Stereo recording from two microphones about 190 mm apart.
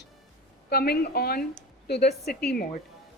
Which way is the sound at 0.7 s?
55° left (ahead or behind).